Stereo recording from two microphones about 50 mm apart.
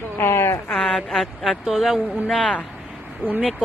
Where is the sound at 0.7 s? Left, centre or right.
Centre.